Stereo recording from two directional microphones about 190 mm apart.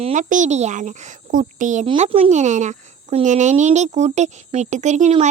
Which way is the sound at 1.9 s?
30° right (ahead or behind).